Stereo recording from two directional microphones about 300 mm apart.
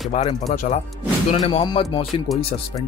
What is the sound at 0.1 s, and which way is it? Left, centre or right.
Speech, left.